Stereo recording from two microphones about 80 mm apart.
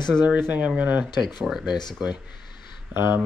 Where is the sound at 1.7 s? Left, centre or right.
Left.